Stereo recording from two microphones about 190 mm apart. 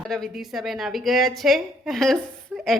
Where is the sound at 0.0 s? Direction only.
Centre (ahead or behind).